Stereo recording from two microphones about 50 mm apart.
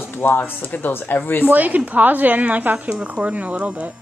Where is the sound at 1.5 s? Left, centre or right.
Right.